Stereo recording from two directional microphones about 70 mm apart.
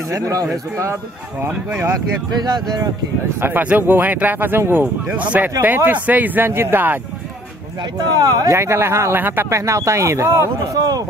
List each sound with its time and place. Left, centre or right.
0.1 s speech: right
2.4 s speech: right
3.3 s speech: right
5.1 s speech: right
8.1 s speech: right
8.5 s speech: right
9.5 s a man's voice: right